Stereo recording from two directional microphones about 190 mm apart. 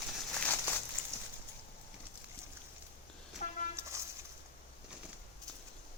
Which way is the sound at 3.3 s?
40° left (ahead or behind).